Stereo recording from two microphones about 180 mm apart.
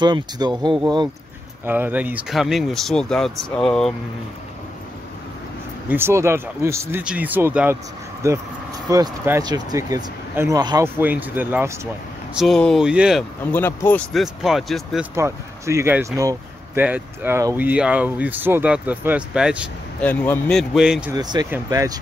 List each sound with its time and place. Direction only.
0.0 s speech: 25° right (ahead or behind)
1.7 s speech: 10° right (ahead or behind)
5.9 s speech: 15° right (ahead or behind)
11.0 s speech: 10° right (ahead or behind)
12.4 s speech: 5° left (ahead or behind)
13.5 s speech: 10° left (ahead or behind)
14.1 s speech: centre (ahead or behind)
15.1 s speech: 15° right (ahead or behind)
20.0 s speech: 10° left (ahead or behind)
21.1 s speech: 20° right (ahead or behind)